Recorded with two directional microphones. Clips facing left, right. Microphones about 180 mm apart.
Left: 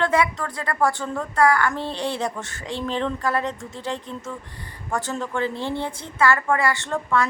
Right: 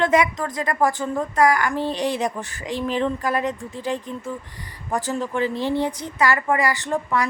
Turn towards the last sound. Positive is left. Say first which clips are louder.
# even
turn(degrees=-15)  # may be behind; listen again after turning